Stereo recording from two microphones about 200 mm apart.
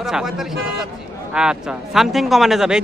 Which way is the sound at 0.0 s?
Centre (ahead or behind).